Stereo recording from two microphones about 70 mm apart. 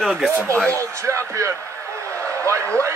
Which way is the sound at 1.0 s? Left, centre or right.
Right.